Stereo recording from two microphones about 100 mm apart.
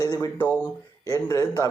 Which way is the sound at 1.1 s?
30° left (ahead or behind).